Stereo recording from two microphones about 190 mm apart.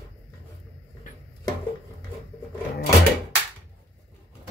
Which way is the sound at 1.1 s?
45° left (ahead or behind).